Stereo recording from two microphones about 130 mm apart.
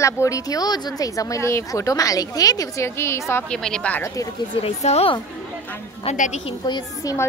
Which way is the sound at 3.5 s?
5° left (ahead or behind).